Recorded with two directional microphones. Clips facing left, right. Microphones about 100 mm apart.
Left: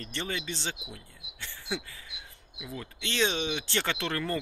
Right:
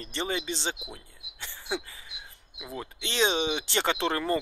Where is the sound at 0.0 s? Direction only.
20° right (ahead or behind).